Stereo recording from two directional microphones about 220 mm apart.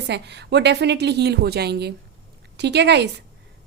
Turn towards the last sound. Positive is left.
turn(degrees=-50)  # may be behind; listen again after turning